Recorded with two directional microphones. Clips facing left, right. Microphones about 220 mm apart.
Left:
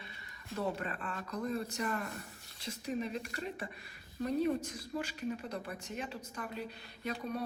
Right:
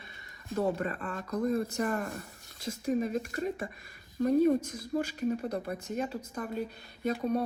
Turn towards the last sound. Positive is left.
turn(degrees=-45)  # may be behind; listen again after turning